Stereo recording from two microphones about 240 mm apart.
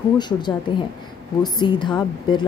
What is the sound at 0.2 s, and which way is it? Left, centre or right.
A woman's voice, centre.